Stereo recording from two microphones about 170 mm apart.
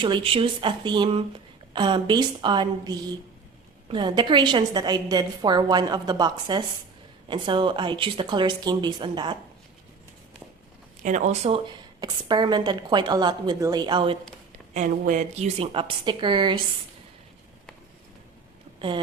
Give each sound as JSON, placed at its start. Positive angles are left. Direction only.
{"t": 0.0, "sound": "a woman's voice", "side_deg": -30}
{"t": 11.0, "sound": "a woman's voice", "side_deg": -45}
{"t": 11.9, "sound": "a woman's voice", "side_deg": -25}
{"t": 14.7, "sound": "a woman's voice", "side_deg": -50}